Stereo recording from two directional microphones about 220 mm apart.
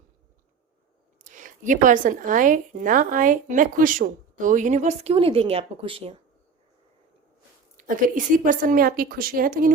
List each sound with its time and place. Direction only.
1.2 s speech: 35° right (ahead or behind)
7.8 s speech: 35° right (ahead or behind)